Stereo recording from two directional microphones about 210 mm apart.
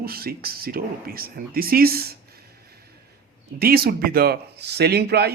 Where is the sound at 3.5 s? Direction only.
45° right (ahead or behind).